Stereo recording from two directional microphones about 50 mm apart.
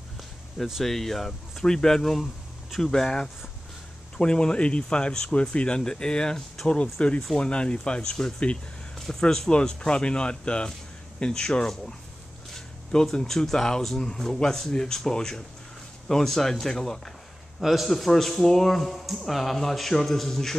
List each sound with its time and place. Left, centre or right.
0.8 s speech: centre
17.6 s a man's voice: centre